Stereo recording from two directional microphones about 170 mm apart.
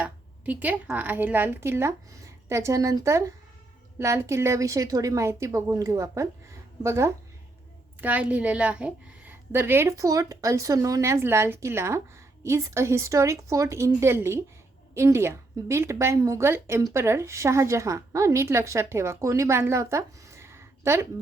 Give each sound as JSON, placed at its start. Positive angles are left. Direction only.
{"t": 0.0, "sound": "a woman's voice", "side_deg": -10}